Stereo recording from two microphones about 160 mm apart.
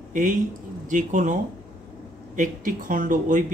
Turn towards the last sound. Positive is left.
turn(degrees=-55)  # may be behind; listen again after turning